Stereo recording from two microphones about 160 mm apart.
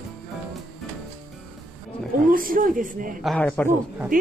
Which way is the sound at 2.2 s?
60° right (ahead or behind).